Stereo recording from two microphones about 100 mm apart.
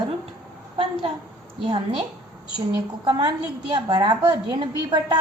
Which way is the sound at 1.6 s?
55° right (ahead or behind).